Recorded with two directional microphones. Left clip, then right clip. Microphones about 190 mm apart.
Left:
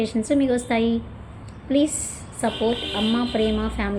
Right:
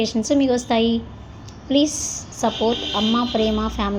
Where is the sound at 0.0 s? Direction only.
15° right (ahead or behind).